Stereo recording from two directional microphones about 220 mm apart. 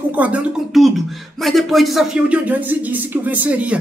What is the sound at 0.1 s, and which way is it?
A woman's voice, 5° right (ahead or behind).